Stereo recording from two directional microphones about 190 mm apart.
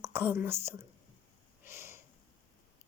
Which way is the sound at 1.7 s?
15° right (ahead or behind).